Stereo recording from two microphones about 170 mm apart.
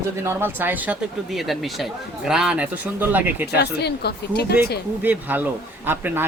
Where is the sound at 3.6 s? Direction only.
75° left (ahead or behind).